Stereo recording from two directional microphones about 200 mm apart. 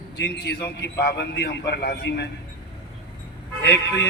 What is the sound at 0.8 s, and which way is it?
A man's voice, 55° left (ahead or behind).